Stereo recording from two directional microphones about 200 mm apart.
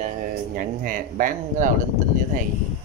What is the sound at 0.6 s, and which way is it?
Speech, 45° right (ahead or behind).